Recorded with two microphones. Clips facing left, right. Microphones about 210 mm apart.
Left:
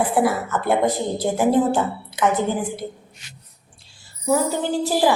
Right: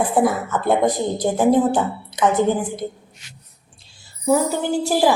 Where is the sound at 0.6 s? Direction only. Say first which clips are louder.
Right 2 dB; 15° right (ahead or behind).